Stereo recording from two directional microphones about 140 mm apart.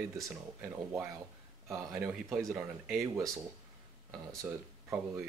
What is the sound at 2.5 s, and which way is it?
Speech, centre (ahead or behind).